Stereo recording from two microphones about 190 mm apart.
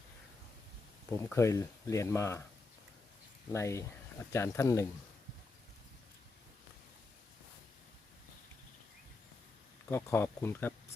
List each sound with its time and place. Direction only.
1.1 s speech: 15° left (ahead or behind)
3.5 s speech: 15° left (ahead or behind)
9.9 s speech: 15° left (ahead or behind)